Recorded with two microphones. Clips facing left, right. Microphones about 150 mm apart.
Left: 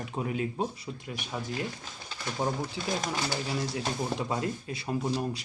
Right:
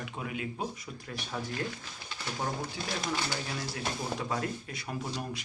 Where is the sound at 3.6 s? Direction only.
25° left (ahead or behind).